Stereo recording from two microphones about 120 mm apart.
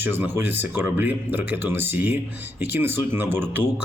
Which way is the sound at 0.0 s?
20° right (ahead or behind).